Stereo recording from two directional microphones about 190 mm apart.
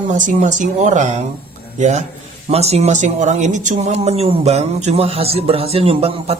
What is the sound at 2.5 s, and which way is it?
Speech, 35° right (ahead or behind).